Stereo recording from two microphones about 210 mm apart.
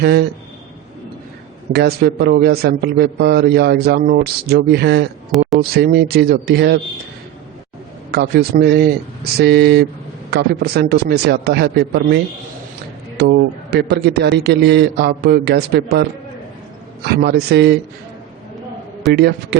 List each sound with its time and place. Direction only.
0.0 s a man's voice: 50° right (ahead or behind)
1.7 s a man's voice: 50° right (ahead or behind)
5.3 s speech: centre (ahead or behind)
5.7 s a man's voice: 50° right (ahead or behind)
8.1 s a man's voice: 50° right (ahead or behind)
17.1 s a man's voice: 50° right (ahead or behind)
19.0 s a man's voice: 50° right (ahead or behind)